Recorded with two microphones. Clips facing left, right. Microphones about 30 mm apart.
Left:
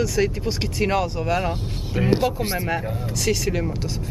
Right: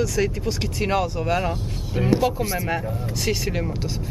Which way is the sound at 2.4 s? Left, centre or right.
Left.